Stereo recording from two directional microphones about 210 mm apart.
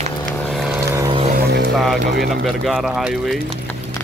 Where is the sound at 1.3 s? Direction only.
50° right (ahead or behind).